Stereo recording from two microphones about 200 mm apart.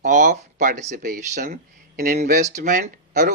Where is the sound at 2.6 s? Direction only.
40° right (ahead or behind).